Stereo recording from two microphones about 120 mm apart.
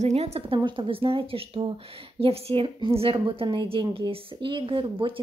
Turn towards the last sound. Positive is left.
turn(degrees=-45)  # may be behind; listen again after turning